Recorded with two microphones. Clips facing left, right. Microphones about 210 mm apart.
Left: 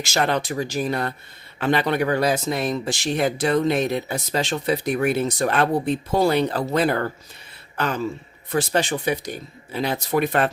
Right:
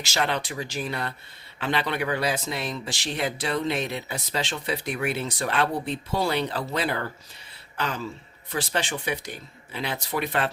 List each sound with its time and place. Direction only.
0.0 s speech: 45° left (ahead or behind)
8.4 s speech: 45° left (ahead or behind)